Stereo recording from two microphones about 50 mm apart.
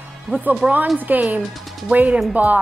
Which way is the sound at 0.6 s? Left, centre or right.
Centre.